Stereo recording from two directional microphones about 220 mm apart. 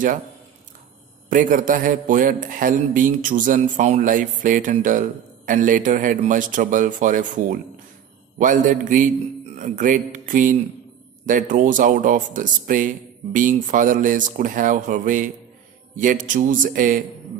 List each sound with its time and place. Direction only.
1.3 s a man's voice: 35° right (ahead or behind)